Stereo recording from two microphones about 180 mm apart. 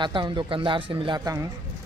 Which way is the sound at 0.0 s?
25° right (ahead or behind).